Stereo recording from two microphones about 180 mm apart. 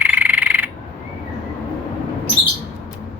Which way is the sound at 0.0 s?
10° right (ahead or behind).